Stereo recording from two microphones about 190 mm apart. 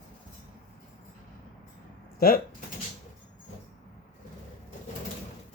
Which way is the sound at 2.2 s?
50° left (ahead or behind).